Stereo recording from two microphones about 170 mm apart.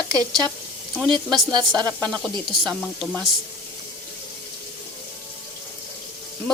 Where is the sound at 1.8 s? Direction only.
5° left (ahead or behind).